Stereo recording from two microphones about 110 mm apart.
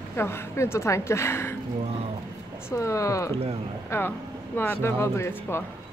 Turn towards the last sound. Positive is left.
turn(degrees=20)  # may be behind; listen again after turning